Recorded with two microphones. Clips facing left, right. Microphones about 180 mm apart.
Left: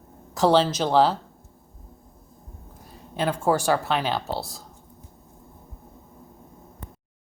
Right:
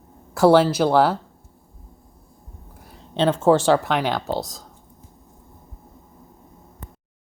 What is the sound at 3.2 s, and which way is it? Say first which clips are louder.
A woman's voice: right 6 dB; 25° right (ahead or behind).